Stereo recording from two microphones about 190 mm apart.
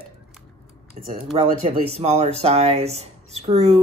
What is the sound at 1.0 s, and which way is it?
Speech, 35° right (ahead or behind).